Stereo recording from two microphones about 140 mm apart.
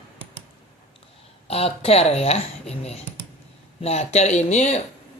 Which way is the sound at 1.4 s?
45° left (ahead or behind).